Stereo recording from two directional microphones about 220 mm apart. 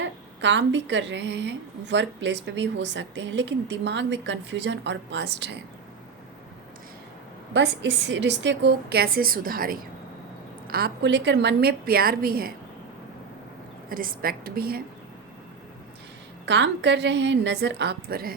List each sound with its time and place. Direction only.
0.0 s a woman's voice: 55° right (ahead or behind)
7.5 s a woman's voice: 55° right (ahead or behind)
13.9 s a woman's voice: 40° right (ahead or behind)
16.5 s a woman's voice: 55° right (ahead or behind)